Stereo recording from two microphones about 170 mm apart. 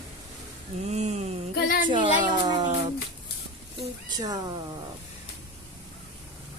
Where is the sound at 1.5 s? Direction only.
60° left (ahead or behind).